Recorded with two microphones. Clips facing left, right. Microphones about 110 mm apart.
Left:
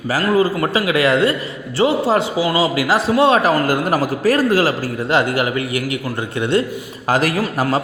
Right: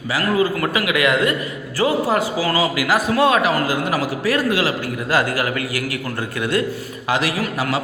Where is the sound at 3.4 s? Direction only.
40° left (ahead or behind).